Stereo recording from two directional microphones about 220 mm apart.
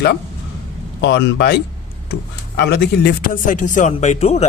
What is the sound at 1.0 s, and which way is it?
Speech, 50° left (ahead or behind).